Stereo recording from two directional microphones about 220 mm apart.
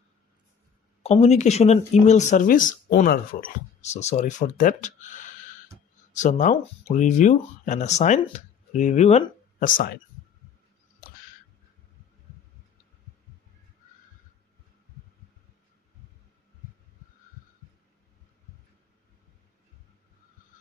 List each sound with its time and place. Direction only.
1.0 s speech: 30° left (ahead or behind)